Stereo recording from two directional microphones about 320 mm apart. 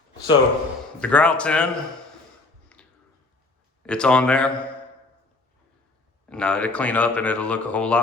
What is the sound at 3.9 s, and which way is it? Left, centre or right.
Speech, centre.